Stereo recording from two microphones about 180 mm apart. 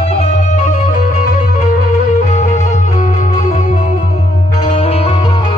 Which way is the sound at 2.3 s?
45° left (ahead or behind).